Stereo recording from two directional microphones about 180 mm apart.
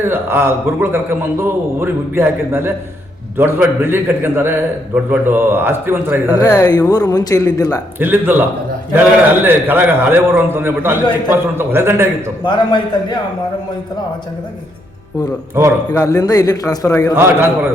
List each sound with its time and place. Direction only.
0.0 s a man's voice: 15° right (ahead or behind)
6.4 s speech: 20° left (ahead or behind)
7.9 s a man's voice: 10° right (ahead or behind)
12.5 s speech: 25° left (ahead or behind)
15.9 s speech: 20° left (ahead or behind)
17.2 s a man's voice: 15° right (ahead or behind)